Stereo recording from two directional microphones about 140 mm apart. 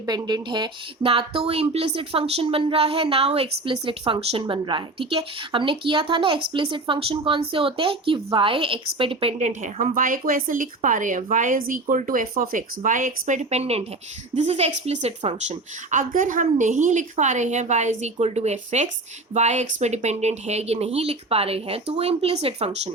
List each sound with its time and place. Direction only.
0.0 s speech: 30° right (ahead or behind)
9.4 s speech: 60° right (ahead or behind)
15.4 s a woman's voice: 65° right (ahead or behind); by 22.9 s 50° right (ahead or behind)